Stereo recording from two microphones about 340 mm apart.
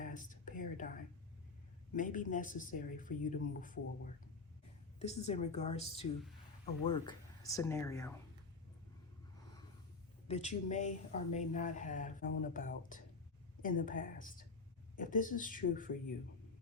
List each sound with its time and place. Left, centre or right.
0.0 s whispering: left
1.9 s speech: left
4.9 s speech: centre
10.2 s speech: centre